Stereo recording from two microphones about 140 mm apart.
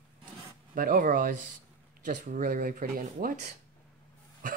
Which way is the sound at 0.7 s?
85° right.